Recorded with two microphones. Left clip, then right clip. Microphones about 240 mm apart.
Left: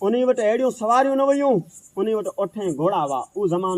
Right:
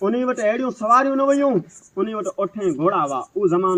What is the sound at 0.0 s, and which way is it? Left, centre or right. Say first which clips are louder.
A man's voice: left 1 dB; left.